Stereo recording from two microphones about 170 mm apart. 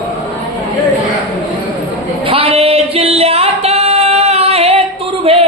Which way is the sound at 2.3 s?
35° right (ahead or behind).